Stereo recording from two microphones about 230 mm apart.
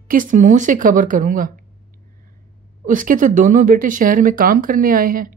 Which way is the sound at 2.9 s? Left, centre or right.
Right.